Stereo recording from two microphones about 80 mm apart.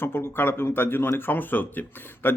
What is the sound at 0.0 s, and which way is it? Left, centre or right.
Speech, left.